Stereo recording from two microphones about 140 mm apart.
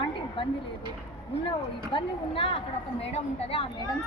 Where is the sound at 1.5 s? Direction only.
40° left (ahead or behind).